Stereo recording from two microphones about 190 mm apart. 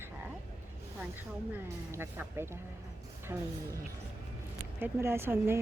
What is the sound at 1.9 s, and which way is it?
Speech, 10° right (ahead or behind).